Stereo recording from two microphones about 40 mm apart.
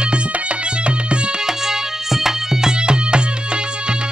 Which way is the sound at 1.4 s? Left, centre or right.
Centre.